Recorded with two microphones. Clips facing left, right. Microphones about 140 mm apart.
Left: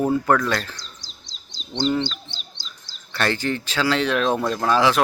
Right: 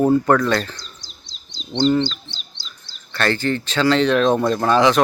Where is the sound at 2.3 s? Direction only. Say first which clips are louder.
Even; 45° left (ahead or behind).